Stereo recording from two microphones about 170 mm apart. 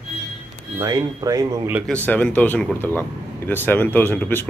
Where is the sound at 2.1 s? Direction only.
10° left (ahead or behind).